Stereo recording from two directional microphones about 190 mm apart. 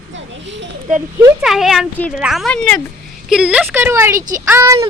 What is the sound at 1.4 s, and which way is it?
A child's voice, centre (ahead or behind).